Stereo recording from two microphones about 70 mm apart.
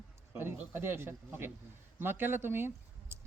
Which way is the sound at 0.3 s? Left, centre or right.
Right.